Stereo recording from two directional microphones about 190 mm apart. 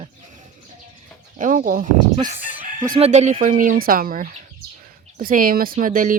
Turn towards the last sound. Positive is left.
turn(degrees=-45)  # may be behind; listen again after turning